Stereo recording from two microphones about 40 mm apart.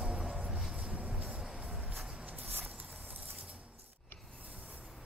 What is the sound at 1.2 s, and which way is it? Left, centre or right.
Train, right.